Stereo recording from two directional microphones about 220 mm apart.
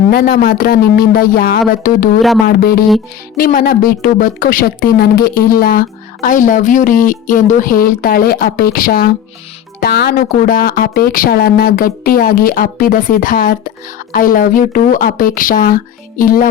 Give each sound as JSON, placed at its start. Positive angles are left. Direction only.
{"t": 0.1, "sound": "speech", "side_deg": 45}